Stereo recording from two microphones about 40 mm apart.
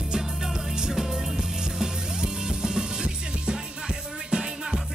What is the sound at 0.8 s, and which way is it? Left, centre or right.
Music, centre.